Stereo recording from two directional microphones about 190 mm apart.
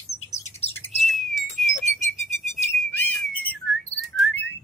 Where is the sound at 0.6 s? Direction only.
35° left (ahead or behind).